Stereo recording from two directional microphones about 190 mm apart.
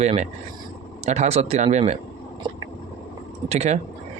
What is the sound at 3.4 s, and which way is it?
Speech, 35° right (ahead or behind).